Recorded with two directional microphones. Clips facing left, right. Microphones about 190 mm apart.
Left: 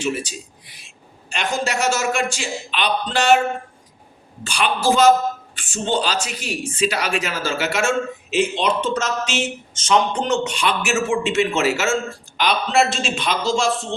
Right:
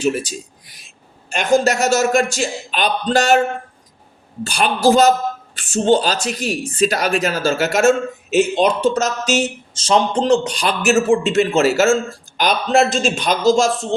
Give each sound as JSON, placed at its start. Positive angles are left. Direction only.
{"t": 0.0, "sound": "speech", "side_deg": -40}
{"t": 4.4, "sound": "a man's voice", "side_deg": -40}